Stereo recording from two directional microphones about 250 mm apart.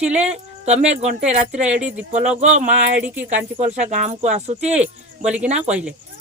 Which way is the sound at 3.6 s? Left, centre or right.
Right.